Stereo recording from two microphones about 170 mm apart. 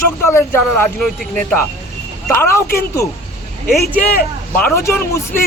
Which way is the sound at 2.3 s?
15° left (ahead or behind).